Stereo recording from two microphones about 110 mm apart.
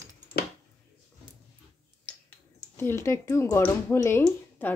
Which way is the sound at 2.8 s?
25° left (ahead or behind).